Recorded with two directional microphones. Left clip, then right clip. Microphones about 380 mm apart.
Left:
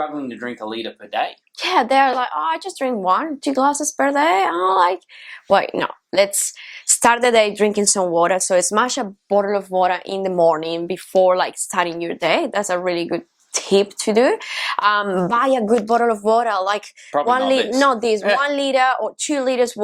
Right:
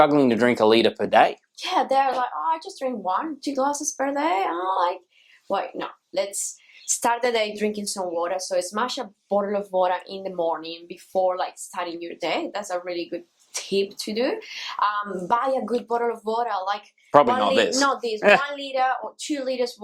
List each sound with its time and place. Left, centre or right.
0.0 s speech: right
1.5 s speech: left
5.5 s speech: left
6.8 s speech: left
9.3 s speech: left
18.5 s speech: left